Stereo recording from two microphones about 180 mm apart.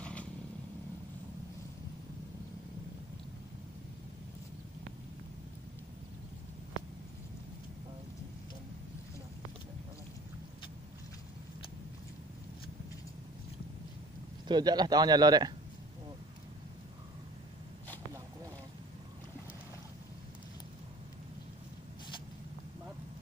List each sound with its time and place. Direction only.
0.0 s vehicle: 5° left (ahead or behind)
14.5 s a man's voice: 25° right (ahead or behind)